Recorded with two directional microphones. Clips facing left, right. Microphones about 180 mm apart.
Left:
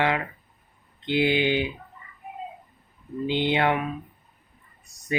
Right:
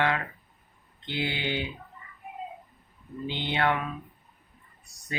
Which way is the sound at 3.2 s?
15° left (ahead or behind).